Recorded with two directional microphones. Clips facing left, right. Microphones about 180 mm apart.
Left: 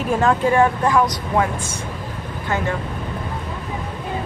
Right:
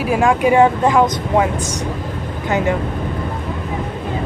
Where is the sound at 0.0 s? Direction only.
10° right (ahead or behind).